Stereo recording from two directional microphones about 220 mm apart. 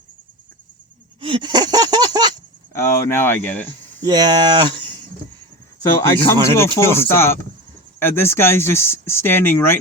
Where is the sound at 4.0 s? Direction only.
20° right (ahead or behind).